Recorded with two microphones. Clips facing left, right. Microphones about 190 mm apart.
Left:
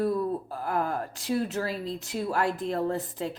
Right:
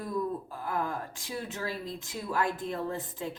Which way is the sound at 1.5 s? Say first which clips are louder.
Left 5 dB; 40° left (ahead or behind).